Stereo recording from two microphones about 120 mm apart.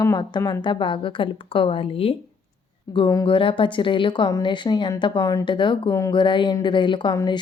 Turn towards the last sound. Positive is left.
turn(degrees=40)  # may be behind; listen again after turning